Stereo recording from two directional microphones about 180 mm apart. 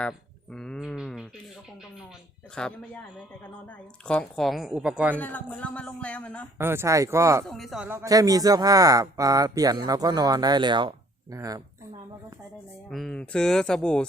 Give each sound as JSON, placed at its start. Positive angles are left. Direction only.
{"t": 0.0, "sound": "a sound", "side_deg": 5}
{"t": 2.6, "sound": "speech", "side_deg": 5}
{"t": 4.0, "sound": "speech", "side_deg": 5}
{"t": 5.1, "sound": "a man's voice", "side_deg": 10}
{"t": 6.6, "sound": "speech", "side_deg": -15}
{"t": 7.4, "sound": "speech", "side_deg": 0}
{"t": 7.9, "sound": "a man's voice", "side_deg": -15}
{"t": 12.9, "sound": "speech", "side_deg": 5}